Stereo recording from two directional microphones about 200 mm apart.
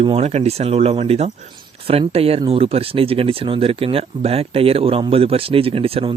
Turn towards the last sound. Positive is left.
turn(degrees=-30)  # may be behind; listen again after turning